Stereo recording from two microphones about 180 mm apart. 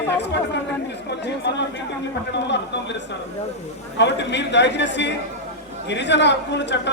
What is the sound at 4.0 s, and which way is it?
A man's voice, 75° left (ahead or behind).